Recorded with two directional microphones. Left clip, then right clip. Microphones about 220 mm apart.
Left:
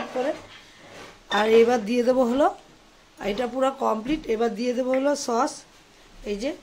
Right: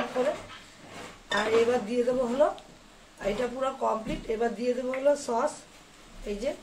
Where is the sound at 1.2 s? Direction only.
45° left (ahead or behind).